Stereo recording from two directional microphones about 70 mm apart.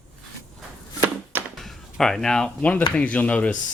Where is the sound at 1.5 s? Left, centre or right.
Centre.